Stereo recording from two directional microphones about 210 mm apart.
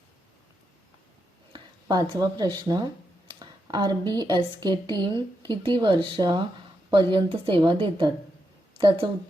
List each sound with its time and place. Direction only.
1.5 s a woman's voice: 20° right (ahead or behind)